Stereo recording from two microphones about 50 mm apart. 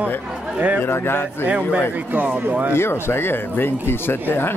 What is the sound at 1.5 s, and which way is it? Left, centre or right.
A man's voice, right.